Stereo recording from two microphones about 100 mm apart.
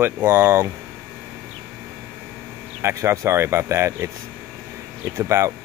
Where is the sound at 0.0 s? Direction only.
20° right (ahead or behind).